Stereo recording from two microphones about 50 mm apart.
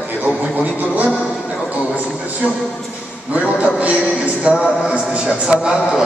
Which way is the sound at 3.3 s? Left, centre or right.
Right.